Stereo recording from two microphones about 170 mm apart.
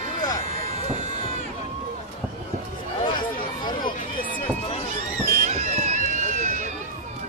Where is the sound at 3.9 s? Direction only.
55° left (ahead or behind).